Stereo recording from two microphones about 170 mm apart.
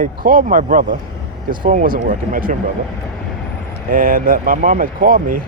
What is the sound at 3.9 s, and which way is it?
Speech, 55° right (ahead or behind).